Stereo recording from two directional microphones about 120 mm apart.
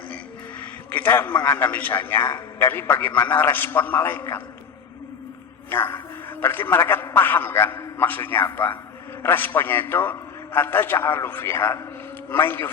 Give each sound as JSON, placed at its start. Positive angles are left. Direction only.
{"t": 0.9, "sound": "a man's voice", "side_deg": 15}
{"t": 5.7, "sound": "a man's voice", "side_deg": 20}